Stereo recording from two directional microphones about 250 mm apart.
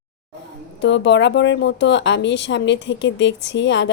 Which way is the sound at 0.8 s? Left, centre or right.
Left.